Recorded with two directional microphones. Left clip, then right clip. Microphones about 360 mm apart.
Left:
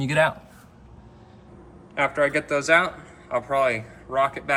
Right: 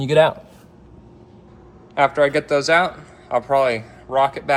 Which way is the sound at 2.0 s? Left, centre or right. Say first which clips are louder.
Right 6 dB; centre.